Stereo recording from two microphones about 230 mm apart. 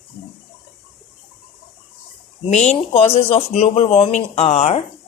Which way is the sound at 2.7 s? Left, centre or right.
Left.